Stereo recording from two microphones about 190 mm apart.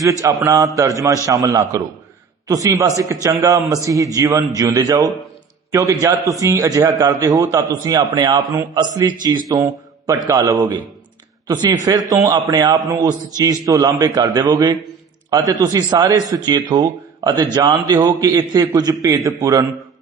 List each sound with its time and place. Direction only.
0.0 s a man's voice: 15° right (ahead or behind)